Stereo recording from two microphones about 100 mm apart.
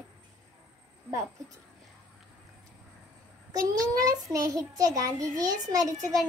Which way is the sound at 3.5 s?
40° right (ahead or behind).